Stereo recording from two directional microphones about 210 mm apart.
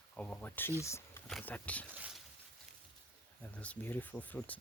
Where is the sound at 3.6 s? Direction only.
10° left (ahead or behind).